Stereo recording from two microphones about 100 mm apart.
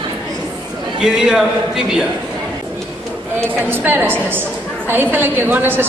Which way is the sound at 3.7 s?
20° right (ahead or behind).